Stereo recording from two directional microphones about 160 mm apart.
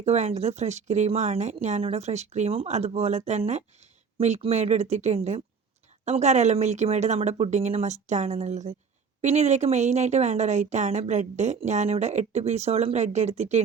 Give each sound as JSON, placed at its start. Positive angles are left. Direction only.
{"t": 0.0, "sound": "speech", "side_deg": -45}